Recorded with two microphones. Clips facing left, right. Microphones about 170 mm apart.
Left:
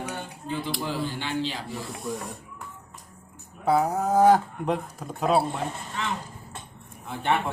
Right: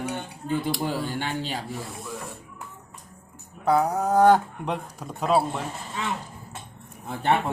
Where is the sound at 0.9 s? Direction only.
45° right (ahead or behind).